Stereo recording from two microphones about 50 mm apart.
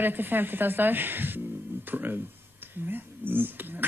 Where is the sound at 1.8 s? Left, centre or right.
Right.